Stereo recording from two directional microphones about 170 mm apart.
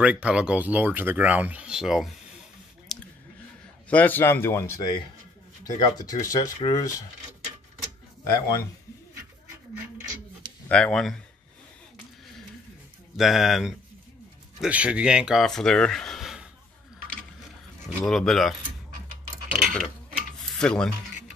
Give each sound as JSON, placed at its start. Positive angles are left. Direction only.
{"t": 0.0, "sound": "speech", "side_deg": -5}
{"t": 2.9, "sound": "a sound", "side_deg": 0}
{"t": 3.9, "sound": "speech", "side_deg": 10}
{"t": 6.2, "sound": "speech", "side_deg": 20}
{"t": 8.2, "sound": "speech", "side_deg": 20}
{"t": 10.7, "sound": "speech", "side_deg": 5}
{"t": 13.1, "sound": "speech", "side_deg": 0}
{"t": 17.8, "sound": "speech", "side_deg": 0}
{"t": 19.5, "sound": "a sound", "side_deg": -5}
{"t": 20.5, "sound": "speech", "side_deg": 5}